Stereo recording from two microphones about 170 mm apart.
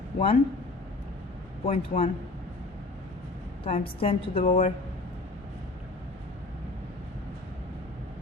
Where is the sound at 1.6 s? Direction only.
35° left (ahead or behind).